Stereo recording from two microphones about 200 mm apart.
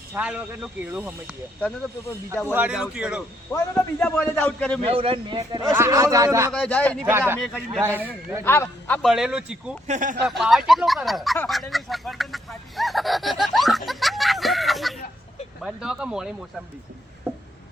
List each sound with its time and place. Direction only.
0.1 s speech: 5° right (ahead or behind)
2.5 s a man's voice: 5° right (ahead or behind)
3.5 s a man's voice: 10° left (ahead or behind)
4.9 s a man's voice: 25° right (ahead or behind)
6.5 s a man's voice: 5° left (ahead or behind)
7.0 s speech: 10° right (ahead or behind)
7.3 s a man's voice: 5° left (ahead or behind)
7.8 s speech: 10° right (ahead or behind)
8.4 s a man's voice: 10° left (ahead or behind); by 9.7 s 5° right (ahead or behind)
9.8 s speech: 40° right (ahead or behind)
10.2 s a man's voice: centre (ahead or behind)